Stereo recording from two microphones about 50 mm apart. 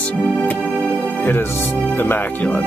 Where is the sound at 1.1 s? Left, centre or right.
Left.